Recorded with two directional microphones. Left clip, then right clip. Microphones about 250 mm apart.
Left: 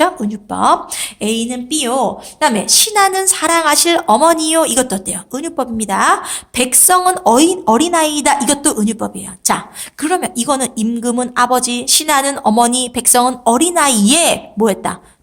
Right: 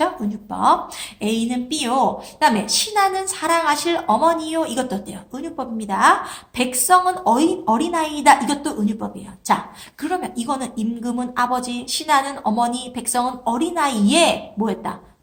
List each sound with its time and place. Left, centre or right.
0.0 s a woman's voice: left